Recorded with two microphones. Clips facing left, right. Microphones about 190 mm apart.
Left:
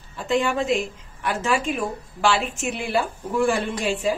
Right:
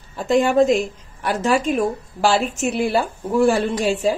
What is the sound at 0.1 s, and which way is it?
A woman's voice, 40° right (ahead or behind).